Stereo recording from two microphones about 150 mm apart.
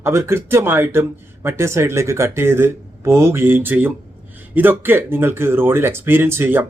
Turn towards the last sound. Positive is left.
turn(degrees=-15)  # may be behind; listen again after turning